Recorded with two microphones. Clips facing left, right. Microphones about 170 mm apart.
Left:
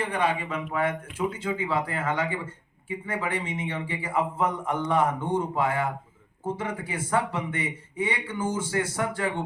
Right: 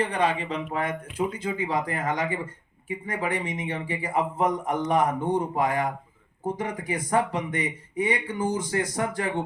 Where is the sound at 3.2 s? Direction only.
15° right (ahead or behind).